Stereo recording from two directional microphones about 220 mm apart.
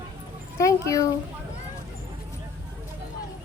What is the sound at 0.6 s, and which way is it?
Speech, 15° left (ahead or behind).